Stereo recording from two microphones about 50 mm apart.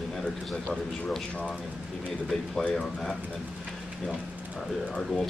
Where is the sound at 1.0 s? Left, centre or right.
Centre.